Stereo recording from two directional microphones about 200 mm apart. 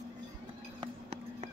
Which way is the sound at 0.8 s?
30° right (ahead or behind).